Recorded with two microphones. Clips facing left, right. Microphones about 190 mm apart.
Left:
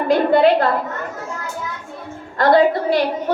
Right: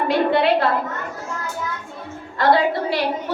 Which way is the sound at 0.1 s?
45° left (ahead or behind).